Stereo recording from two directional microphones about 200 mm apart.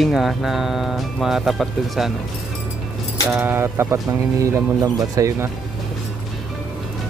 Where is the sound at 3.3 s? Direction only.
10° right (ahead or behind).